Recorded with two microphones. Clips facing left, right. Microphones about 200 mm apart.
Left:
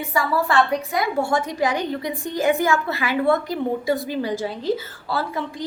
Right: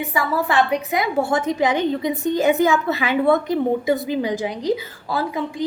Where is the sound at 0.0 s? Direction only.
20° right (ahead or behind).